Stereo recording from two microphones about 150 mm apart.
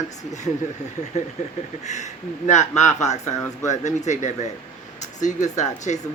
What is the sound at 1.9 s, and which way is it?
Speech, 50° left (ahead or behind).